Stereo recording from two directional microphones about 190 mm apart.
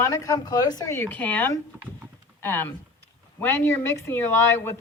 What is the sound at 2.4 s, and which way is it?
Speech, 10° left (ahead or behind).